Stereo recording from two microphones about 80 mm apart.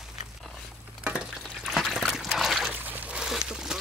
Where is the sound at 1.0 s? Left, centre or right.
Centre.